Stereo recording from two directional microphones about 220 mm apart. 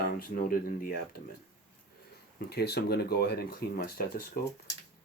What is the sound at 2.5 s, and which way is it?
Speech, 45° left (ahead or behind).